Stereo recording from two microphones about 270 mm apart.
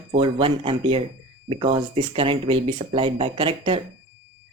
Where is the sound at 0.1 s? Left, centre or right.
Centre.